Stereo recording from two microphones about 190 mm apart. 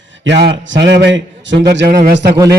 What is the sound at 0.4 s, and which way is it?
A man's voice, 70° right (ahead or behind).